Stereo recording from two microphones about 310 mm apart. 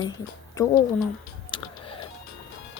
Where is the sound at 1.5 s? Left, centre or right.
Centre.